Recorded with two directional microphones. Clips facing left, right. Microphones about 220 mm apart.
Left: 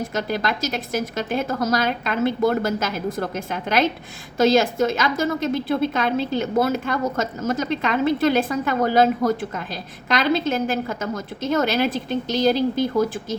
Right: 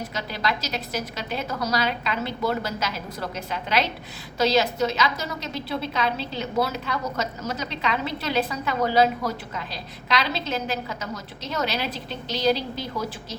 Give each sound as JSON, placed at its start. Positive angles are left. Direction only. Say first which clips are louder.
{"t": 0.1, "sound": "a woman's voice", "louder": "left 5 dB", "side_deg": 50}